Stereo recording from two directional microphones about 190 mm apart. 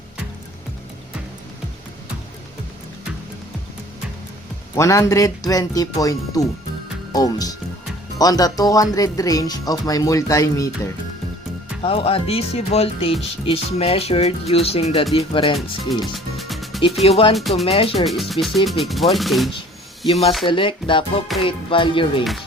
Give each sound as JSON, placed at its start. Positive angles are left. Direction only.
{"t": 4.7, "sound": "speech", "side_deg": 15}
{"t": 11.8, "sound": "speech", "side_deg": 30}
{"t": 16.1, "sound": "music", "side_deg": 0}
{"t": 17.0, "sound": "speech", "side_deg": 30}
{"t": 18.0, "sound": "speech", "side_deg": 0}
{"t": 20.1, "sound": "speech", "side_deg": 30}
{"t": 22.2, "sound": "speech", "side_deg": 0}